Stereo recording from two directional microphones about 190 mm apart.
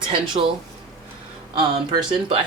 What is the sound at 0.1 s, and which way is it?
Speech, 25° right (ahead or behind).